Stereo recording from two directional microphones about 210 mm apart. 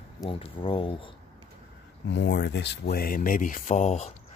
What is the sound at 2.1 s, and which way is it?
Speech, 55° left (ahead or behind).